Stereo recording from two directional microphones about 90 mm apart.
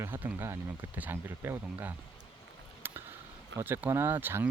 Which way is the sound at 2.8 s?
25° right (ahead or behind).